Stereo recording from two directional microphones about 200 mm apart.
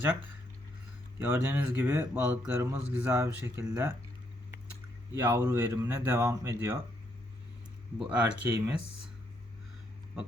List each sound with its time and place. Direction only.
1.3 s speech: 10° right (ahead or behind)
5.1 s speech: 20° right (ahead or behind)
7.9 s speech: 5° right (ahead or behind)